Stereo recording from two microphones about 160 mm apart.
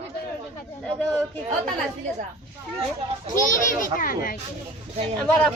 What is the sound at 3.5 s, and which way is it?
Speech, 60° left (ahead or behind).